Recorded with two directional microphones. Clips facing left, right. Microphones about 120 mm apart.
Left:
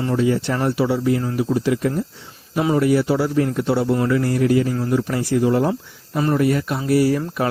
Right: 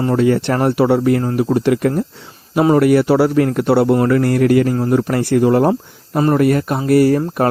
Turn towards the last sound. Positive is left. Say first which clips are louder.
# right 5 dB
turn(degrees=-50)  # may be behind; listen again after turning